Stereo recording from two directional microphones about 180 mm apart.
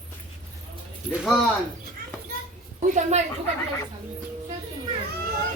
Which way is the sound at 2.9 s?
40° right (ahead or behind).